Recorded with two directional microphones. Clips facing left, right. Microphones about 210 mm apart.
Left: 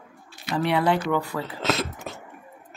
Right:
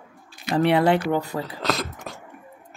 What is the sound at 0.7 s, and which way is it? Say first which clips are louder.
Speech: right 1 dB; 25° right (ahead or behind).